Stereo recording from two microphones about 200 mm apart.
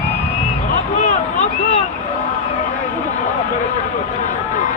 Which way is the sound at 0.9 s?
35° left (ahead or behind).